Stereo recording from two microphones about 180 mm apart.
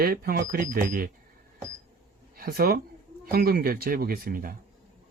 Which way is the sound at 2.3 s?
55° right (ahead or behind).